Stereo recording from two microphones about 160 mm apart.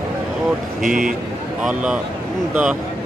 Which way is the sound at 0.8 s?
55° right (ahead or behind).